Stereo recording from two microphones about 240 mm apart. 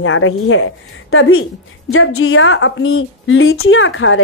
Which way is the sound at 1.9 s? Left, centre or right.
Left.